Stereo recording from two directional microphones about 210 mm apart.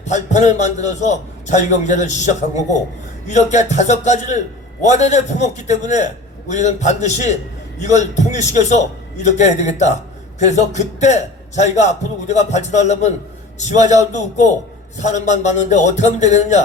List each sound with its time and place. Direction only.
0.0 s a man's voice: 35° left (ahead or behind)